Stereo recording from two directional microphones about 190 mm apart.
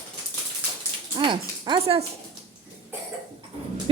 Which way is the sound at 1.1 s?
25° right (ahead or behind).